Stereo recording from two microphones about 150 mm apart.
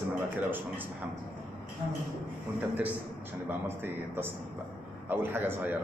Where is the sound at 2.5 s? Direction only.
10° right (ahead or behind).